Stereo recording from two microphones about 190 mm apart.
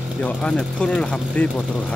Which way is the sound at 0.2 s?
5° left (ahead or behind).